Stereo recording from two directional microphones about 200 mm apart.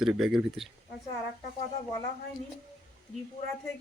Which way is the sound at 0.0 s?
5° right (ahead or behind).